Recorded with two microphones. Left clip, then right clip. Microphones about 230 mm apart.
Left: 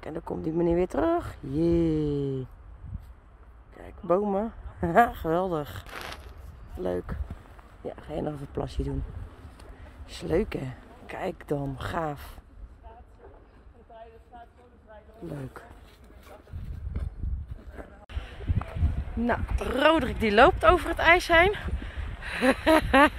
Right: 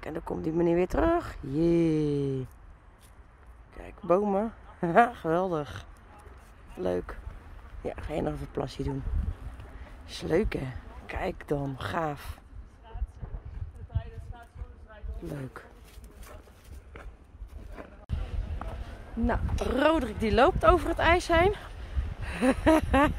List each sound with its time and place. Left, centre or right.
0.0 s speech: centre
3.8 s speech: centre
13.9 s a sound: right
15.2 s speech: centre
19.6 s speech: centre